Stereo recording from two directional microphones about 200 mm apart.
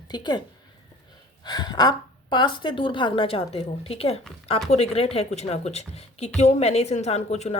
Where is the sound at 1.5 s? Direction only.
20° left (ahead or behind).